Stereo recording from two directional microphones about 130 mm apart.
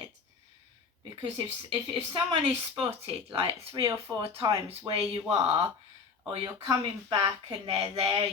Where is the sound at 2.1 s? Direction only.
35° right (ahead or behind).